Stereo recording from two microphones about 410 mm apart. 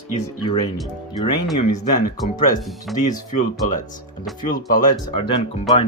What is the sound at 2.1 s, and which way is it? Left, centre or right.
Speech, centre.